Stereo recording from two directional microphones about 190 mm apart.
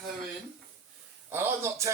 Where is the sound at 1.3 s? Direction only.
10° right (ahead or behind).